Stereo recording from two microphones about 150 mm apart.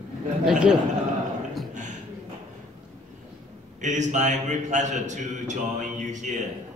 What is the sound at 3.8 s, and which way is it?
A man's voice, 55° right (ahead or behind).